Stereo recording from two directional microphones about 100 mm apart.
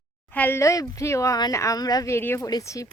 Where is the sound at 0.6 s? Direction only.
35° left (ahead or behind).